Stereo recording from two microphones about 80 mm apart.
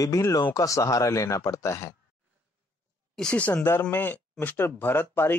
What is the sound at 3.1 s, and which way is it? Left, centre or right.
Speech, centre.